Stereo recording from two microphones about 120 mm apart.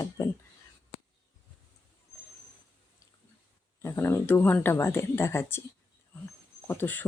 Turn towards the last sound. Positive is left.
turn(degrees=15)  # may be behind; listen again after turning